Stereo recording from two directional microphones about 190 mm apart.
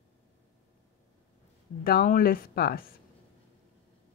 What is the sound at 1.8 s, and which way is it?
Speech, 50° left (ahead or behind).